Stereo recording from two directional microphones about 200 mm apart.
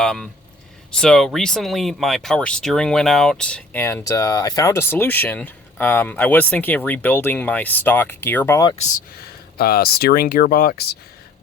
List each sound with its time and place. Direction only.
0.0 s speech: 5° left (ahead or behind)
9.6 s speech: 50° left (ahead or behind)